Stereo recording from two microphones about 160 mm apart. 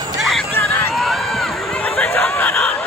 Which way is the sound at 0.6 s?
15° left (ahead or behind).